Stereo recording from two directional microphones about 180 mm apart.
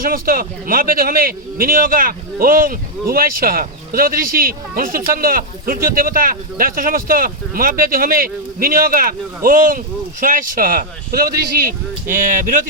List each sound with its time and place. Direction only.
0.0 s a man's voice: 55° right (ahead or behind)